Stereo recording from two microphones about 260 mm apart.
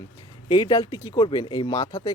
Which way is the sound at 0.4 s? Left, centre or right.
Centre.